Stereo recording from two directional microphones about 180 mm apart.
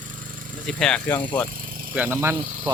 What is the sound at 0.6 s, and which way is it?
Speech, 5° left (ahead or behind).